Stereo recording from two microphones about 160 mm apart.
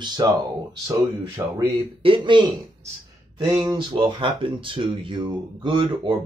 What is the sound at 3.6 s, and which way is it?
Speech, 30° right (ahead or behind).